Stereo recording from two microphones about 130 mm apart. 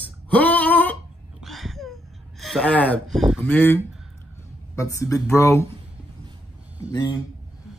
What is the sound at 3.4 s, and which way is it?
Speech, 15° left (ahead or behind).